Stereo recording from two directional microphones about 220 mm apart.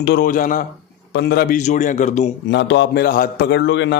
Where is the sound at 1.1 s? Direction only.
50° left (ahead or behind); by 2.3 s 30° left (ahead or behind).